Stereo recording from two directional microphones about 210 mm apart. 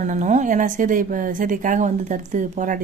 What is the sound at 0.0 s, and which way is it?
Speech, 35° right (ahead or behind).